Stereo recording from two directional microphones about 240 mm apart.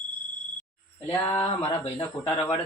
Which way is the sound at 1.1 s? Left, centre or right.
Centre.